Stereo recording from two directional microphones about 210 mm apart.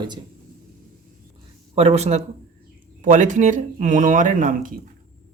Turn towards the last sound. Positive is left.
turn(degrees=-40)  # may be behind; listen again after turning